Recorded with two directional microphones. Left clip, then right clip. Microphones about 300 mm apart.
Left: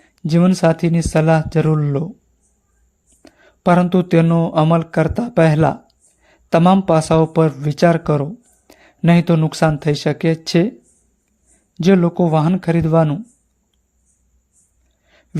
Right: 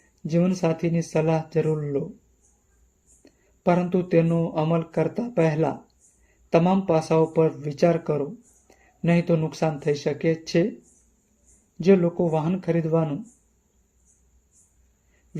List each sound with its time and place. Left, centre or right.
0.2 s speech: left
3.2 s speech: left
11.8 s speech: left